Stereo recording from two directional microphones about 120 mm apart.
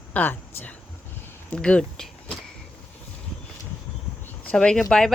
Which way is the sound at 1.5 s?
10° left (ahead or behind).